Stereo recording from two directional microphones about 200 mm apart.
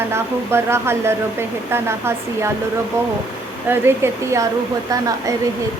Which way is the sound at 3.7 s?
10° right (ahead or behind).